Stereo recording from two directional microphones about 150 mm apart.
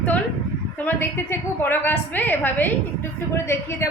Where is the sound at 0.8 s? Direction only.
15° left (ahead or behind).